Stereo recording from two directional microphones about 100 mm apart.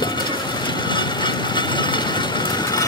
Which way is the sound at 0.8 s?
50° left (ahead or behind).